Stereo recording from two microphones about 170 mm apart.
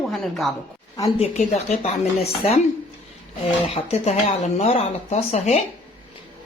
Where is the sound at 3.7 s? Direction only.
40° left (ahead or behind).